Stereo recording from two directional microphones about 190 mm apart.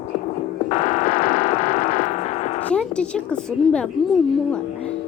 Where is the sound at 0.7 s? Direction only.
40° left (ahead or behind).